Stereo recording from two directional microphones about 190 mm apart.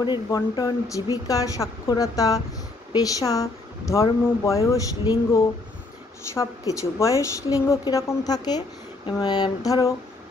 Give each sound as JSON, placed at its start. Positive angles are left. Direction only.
{"t": 0.0, "sound": "a woman's voice", "side_deg": 20}